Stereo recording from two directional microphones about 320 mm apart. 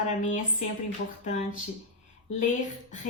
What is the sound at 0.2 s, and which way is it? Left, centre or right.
A woman's voice, left.